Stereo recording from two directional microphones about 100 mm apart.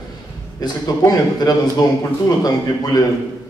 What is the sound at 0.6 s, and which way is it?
A man's voice, 40° left (ahead or behind).